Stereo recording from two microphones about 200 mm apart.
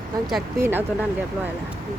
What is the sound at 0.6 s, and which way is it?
Speech, 10° right (ahead or behind).